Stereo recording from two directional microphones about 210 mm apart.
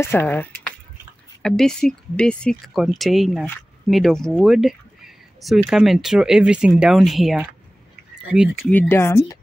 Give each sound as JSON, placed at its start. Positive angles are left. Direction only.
{"t": 0.0, "sound": "speech", "side_deg": 10}
{"t": 8.7, "sound": "speech", "side_deg": 10}